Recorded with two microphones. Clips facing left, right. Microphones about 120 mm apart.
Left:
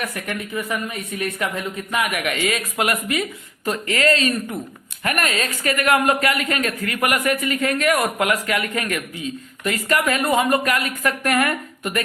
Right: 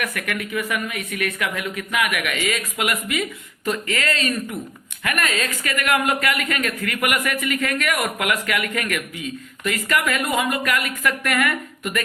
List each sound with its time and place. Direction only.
0.0 s a woman's voice: 30° left (ahead or behind)